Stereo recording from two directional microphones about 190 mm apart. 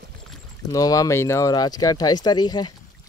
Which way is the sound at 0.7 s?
20° left (ahead or behind).